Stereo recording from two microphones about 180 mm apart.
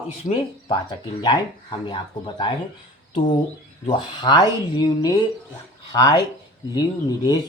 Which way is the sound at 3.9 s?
25° left (ahead or behind).